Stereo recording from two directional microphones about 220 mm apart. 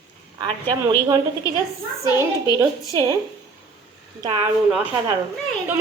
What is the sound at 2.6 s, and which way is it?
Speech, 15° right (ahead or behind).